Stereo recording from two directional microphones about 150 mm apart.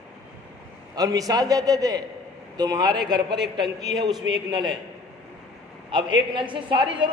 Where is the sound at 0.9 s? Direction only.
25° right (ahead or behind).